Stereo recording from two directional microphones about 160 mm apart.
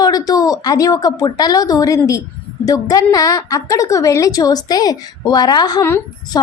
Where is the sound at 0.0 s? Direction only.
25° left (ahead or behind).